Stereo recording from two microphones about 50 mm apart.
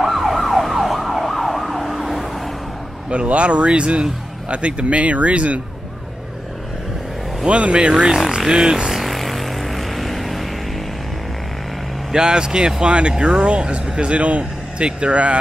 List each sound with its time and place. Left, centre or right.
0.0 s emergency vehicle: centre
3.1 s speech: right
7.4 s speech: right
8.5 s vehicle: centre
12.1 s speech: centre